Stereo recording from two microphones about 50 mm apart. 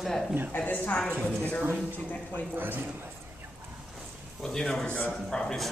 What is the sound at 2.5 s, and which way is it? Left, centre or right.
Speech, right.